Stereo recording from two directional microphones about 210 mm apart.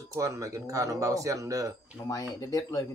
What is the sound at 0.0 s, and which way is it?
Speech, 15° right (ahead or behind).